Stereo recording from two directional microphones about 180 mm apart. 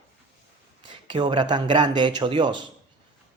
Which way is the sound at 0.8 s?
25° right (ahead or behind).